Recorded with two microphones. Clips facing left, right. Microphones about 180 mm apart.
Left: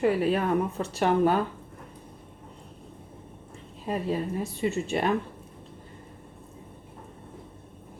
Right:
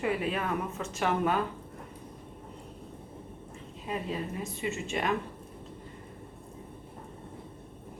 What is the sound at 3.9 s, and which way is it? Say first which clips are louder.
Speech: left 6 dB; 40° left (ahead or behind).